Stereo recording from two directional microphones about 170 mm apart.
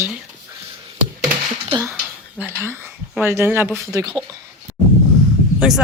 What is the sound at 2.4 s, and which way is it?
Speech, 15° right (ahead or behind).